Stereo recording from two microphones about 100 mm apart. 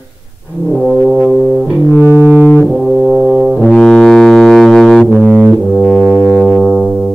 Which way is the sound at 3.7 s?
5° left (ahead or behind).